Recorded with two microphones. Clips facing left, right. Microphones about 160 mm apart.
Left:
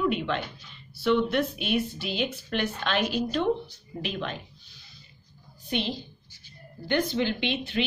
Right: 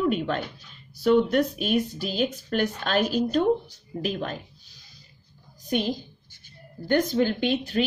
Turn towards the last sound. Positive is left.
turn(degrees=-40)  # may be behind; listen again after turning